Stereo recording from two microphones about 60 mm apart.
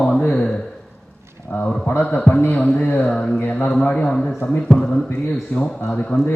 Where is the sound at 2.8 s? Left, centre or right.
Left.